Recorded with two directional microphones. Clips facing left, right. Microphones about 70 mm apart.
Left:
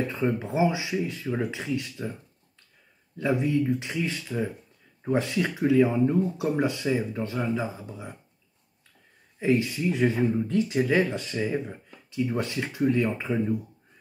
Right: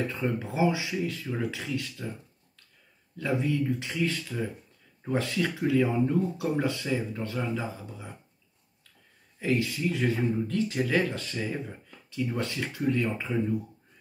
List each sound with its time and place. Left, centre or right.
0.1 s speech: left
3.2 s speech: centre
9.4 s speech: left